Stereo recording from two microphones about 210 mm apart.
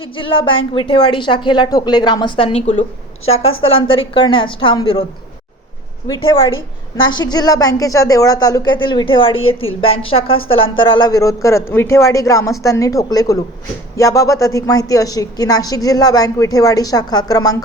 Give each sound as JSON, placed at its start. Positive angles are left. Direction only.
{"t": 0.0, "sound": "a woman's voice", "side_deg": 25}
{"t": 6.9, "sound": "a woman's voice", "side_deg": 20}